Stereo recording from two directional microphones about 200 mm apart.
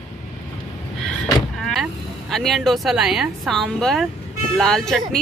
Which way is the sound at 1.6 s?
Centre (ahead or behind).